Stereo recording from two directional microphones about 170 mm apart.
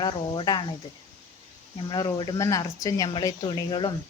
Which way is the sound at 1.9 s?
25° left (ahead or behind).